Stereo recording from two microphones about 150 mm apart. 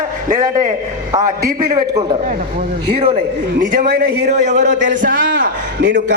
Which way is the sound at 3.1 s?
70° right (ahead or behind).